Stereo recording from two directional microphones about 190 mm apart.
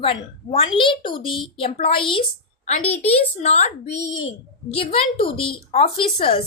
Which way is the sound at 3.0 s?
35° left (ahead or behind).